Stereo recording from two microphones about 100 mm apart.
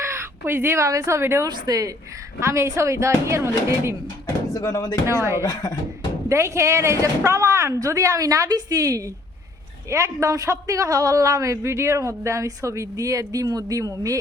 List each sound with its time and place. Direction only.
0.0 s speech: 25° right (ahead or behind)
1.5 s a man's voice: 45° right (ahead or behind)
4.5 s speech: 40° left (ahead or behind)
5.0 s speech: 30° right (ahead or behind)
5.4 s speech: 40° left (ahead or behind)
6.2 s a man's voice: 30° right (ahead or behind)